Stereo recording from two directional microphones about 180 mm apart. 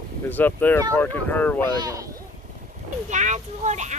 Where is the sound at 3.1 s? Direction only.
40° right (ahead or behind).